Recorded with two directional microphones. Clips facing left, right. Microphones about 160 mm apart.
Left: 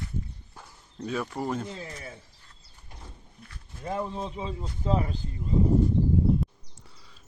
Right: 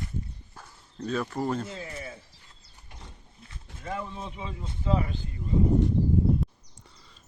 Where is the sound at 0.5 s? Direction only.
10° left (ahead or behind).